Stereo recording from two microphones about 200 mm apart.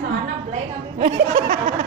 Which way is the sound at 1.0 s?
50° right (ahead or behind).